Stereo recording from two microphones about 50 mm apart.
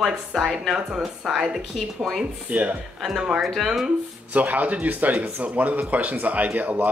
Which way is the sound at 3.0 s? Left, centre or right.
Centre.